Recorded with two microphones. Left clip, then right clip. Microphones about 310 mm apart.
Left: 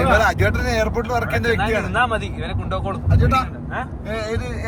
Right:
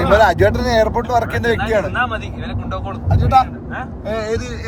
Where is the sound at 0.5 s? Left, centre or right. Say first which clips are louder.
Right 5 dB; right.